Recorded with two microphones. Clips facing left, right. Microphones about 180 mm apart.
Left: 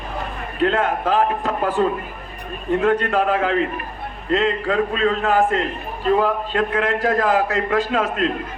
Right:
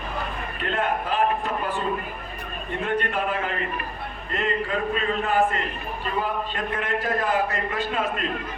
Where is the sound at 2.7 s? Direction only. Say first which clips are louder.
Left 8 dB; 90° left.